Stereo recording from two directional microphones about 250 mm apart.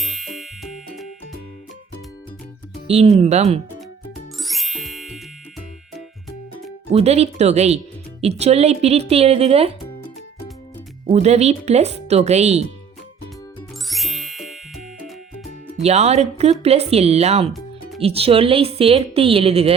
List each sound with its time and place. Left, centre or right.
0.0 s music: centre
2.8 s speech: right
4.4 s music: centre
6.9 s speech: right
11.0 s speech: right
13.6 s ding: centre
15.8 s speech: right